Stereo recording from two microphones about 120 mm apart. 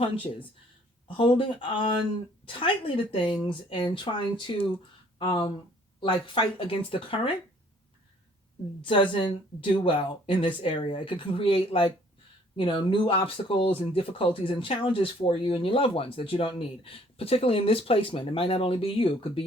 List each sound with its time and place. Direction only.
0.0 s speech: 45° left (ahead or behind)
8.8 s speech: 45° left (ahead or behind)